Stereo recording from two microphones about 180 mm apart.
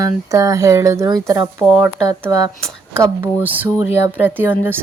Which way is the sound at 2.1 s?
20° right (ahead or behind).